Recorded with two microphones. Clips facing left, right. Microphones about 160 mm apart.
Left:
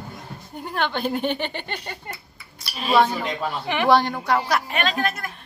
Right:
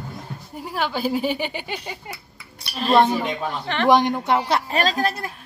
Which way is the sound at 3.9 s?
20° right (ahead or behind).